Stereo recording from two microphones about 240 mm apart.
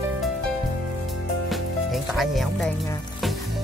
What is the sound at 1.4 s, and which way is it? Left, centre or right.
Music, centre.